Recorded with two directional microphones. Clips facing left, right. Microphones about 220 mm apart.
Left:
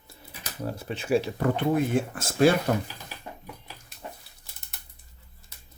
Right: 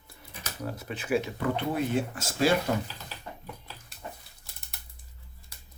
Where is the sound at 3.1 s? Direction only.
15° left (ahead or behind).